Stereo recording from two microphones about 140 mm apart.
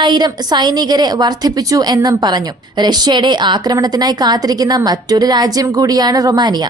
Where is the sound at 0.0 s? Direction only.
30° right (ahead or behind).